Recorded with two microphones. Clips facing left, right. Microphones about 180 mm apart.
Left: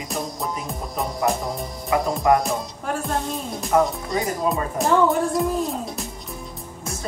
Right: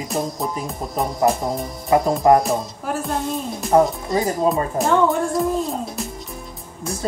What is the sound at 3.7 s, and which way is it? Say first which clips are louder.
Speech: right 4 dB; 30° right (ahead or behind).